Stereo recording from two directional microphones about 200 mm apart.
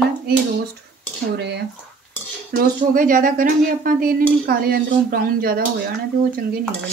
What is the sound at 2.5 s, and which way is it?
Speech, 45° right (ahead or behind).